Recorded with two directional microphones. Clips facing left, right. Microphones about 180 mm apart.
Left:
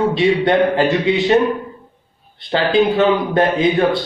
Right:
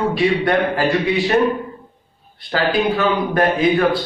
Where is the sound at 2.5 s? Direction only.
25° left (ahead or behind).